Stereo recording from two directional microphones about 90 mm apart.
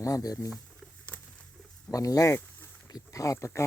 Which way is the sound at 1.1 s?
20° left (ahead or behind).